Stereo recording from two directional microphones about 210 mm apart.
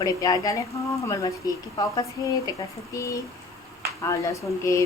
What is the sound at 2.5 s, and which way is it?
Speech, 15° left (ahead or behind).